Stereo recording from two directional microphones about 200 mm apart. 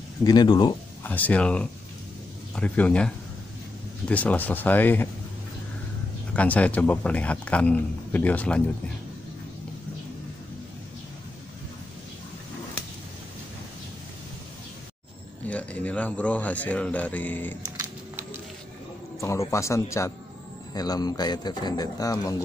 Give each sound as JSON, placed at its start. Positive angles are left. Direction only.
{"t": 0.2, "sound": "a man's voice", "side_deg": 20}
{"t": 1.0, "sound": "speech", "side_deg": 10}
{"t": 4.1, "sound": "speech", "side_deg": 5}
{"t": 6.3, "sound": "speech", "side_deg": 5}
{"t": 15.4, "sound": "speech", "side_deg": 5}
{"t": 17.7, "sound": "a sound", "side_deg": -10}
{"t": 19.1, "sound": "a man's voice", "side_deg": 15}